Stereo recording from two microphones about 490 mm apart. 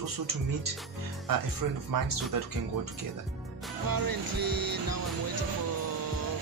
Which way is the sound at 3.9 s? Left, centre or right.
Right.